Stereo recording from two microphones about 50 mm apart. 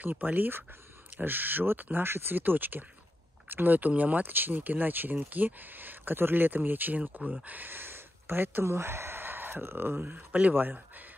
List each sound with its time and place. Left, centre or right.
0.0 s speech: right
8.6 s speech: right